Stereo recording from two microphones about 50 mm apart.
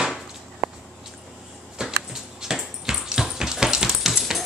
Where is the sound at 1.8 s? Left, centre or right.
Centre.